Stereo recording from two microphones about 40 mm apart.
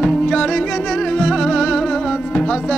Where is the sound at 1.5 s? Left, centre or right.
Centre.